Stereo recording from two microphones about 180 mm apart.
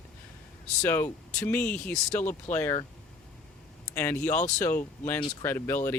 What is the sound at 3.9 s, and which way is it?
Speech, 10° left (ahead or behind).